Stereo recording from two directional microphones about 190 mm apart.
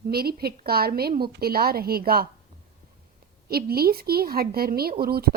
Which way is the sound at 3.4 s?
55° right (ahead or behind).